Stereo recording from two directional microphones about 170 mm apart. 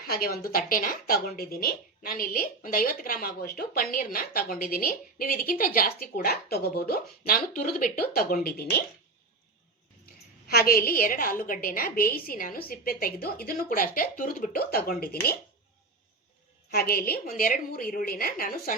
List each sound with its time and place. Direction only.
0.0 s speech: 65° left (ahead or behind)
10.5 s speech: 60° left (ahead or behind)
16.7 s speech: 60° left (ahead or behind)